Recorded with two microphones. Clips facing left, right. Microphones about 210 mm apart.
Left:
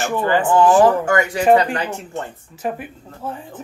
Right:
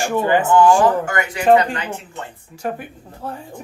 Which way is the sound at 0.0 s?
20° right (ahead or behind).